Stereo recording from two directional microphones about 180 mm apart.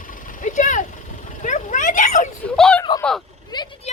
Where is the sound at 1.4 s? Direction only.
45° left (ahead or behind).